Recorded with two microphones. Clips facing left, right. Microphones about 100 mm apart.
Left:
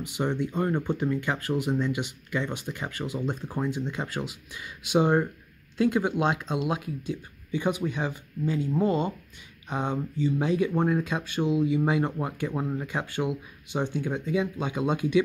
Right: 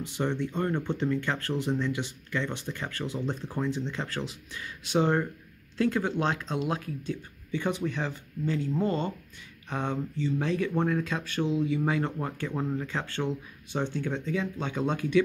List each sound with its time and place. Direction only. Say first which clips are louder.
0.0 s speech: left 2 dB; 15° left (ahead or behind)